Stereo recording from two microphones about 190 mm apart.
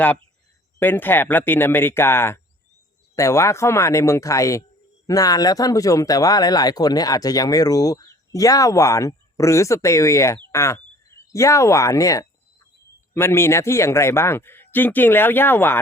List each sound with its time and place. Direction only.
0.8 s speech: 10° left (ahead or behind)